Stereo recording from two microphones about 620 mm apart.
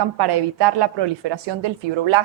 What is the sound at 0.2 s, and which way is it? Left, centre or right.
A woman's voice, right.